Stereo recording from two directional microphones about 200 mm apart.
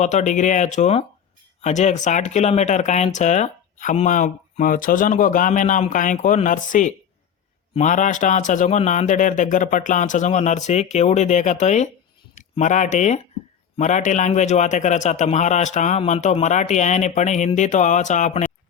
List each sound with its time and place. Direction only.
0.0 s speech: 35° left (ahead or behind)